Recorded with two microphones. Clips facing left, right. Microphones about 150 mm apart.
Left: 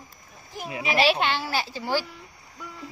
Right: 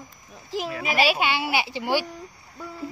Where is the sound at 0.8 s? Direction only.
5° right (ahead or behind).